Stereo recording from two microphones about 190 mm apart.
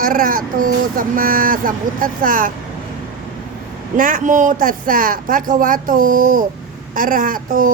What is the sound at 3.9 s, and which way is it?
Speech, 45° right (ahead or behind).